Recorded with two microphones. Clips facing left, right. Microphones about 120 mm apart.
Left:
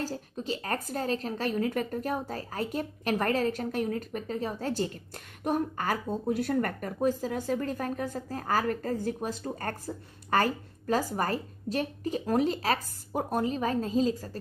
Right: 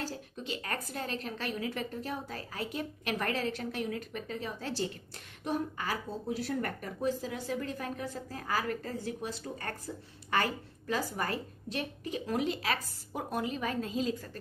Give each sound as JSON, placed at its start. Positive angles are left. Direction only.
{"t": 0.0, "sound": "a woman's voice", "side_deg": 40}